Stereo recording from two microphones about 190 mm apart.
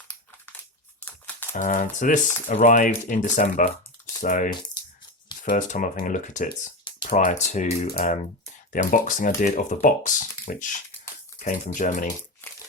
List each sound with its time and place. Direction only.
1.0 s crumpling: 10° left (ahead or behind)
1.5 s speech: 40° left (ahead or behind)
6.9 s a sound: 25° left (ahead or behind)
7.3 s speech: 40° left (ahead or behind)
12.0 s crumpling: 15° left (ahead or behind)